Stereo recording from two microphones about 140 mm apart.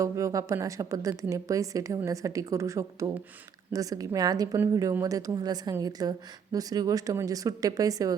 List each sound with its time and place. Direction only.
0.0 s speech: 20° right (ahead or behind)